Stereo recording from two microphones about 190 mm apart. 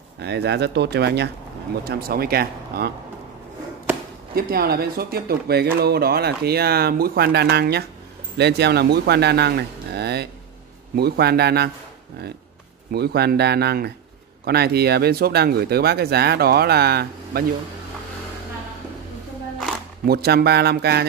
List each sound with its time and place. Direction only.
0.2 s speech: 60° right (ahead or behind)
4.4 s speech: 55° right (ahead or behind)
12.9 s speech: 55° right (ahead or behind)
20.1 s speech: 55° right (ahead or behind)